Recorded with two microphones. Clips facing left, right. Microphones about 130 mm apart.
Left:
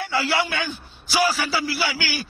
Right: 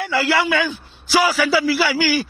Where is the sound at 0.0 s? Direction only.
90° right.